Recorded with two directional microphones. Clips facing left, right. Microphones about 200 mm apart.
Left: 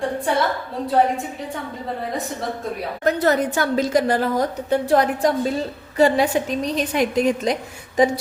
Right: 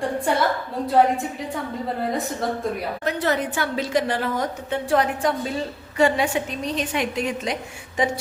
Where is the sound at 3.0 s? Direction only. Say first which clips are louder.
Left 6 dB; 40° left (ahead or behind).